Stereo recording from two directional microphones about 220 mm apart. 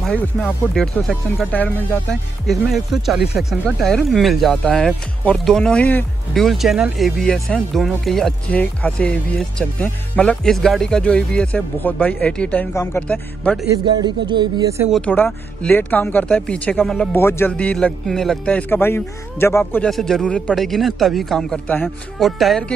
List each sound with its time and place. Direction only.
0.0 s speech: 5° left (ahead or behind)
13.7 s speech: 20° right (ahead or behind)
14.9 s speech: 5° left (ahead or behind)